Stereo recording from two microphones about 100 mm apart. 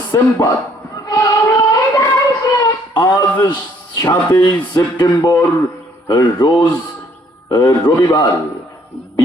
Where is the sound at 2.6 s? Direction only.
40° left (ahead or behind).